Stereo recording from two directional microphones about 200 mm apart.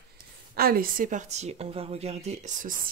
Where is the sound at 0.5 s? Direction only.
50° right (ahead or behind).